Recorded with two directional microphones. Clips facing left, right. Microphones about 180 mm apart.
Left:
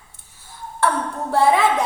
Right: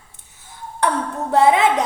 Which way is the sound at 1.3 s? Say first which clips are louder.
Right 2 dB; 20° right (ahead or behind).